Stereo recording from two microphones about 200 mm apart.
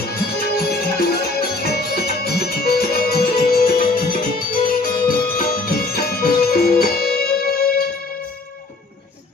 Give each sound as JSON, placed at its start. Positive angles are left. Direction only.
{"t": 0.1, "sound": "music", "side_deg": 50}